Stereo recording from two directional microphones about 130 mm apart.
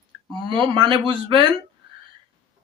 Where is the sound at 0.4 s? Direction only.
40° right (ahead or behind).